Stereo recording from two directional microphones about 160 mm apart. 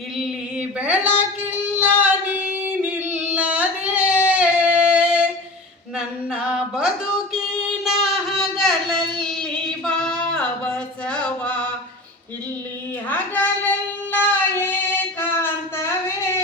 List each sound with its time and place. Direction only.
0.8 s speech: 10° right (ahead or behind)
1.6 s singing: 10° right (ahead or behind)
6.3 s a sound: 5° right (ahead or behind)
11.1 s chant: 5° left (ahead or behind)
13.1 s child singing: 10° left (ahead or behind)
15.2 s a sound: 15° left (ahead or behind)